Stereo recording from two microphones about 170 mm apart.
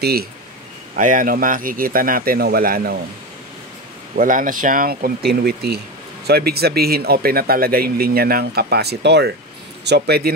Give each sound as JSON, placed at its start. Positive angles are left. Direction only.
{"t": 0.0, "sound": "speech", "side_deg": -65}
{"t": 0.9, "sound": "speech", "side_deg": -50}
{"t": 4.1, "sound": "speech", "side_deg": -55}